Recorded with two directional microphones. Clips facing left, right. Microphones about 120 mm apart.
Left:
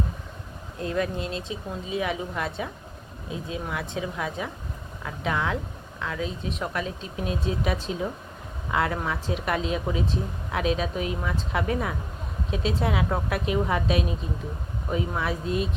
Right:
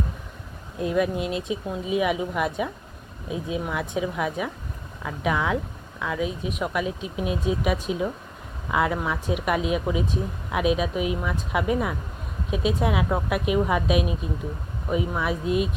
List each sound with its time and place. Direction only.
0.8 s speech: 15° right (ahead or behind)
15.2 s speech: 15° right (ahead or behind)